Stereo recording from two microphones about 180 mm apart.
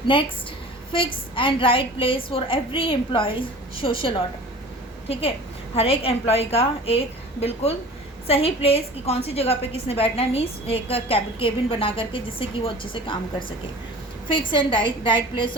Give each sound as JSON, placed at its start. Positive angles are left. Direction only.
{"t": 0.1, "sound": "a woman's voice", "side_deg": 30}
{"t": 5.7, "sound": "a woman's voice", "side_deg": 30}
{"t": 14.3, "sound": "a woman's voice", "side_deg": 25}